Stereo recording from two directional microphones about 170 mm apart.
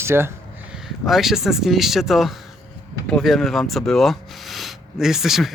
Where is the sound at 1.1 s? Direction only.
Centre (ahead or behind).